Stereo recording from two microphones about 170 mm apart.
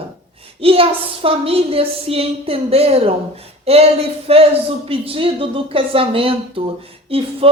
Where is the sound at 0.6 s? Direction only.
35° right (ahead or behind).